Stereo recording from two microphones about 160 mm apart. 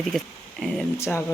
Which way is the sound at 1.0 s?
15° left (ahead or behind).